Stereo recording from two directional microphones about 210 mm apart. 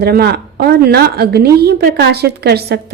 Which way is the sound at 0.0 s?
50° right (ahead or behind).